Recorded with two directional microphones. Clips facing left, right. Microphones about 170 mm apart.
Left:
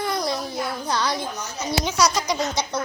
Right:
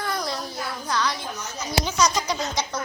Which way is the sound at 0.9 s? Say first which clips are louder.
Even; 30° left (ahead or behind).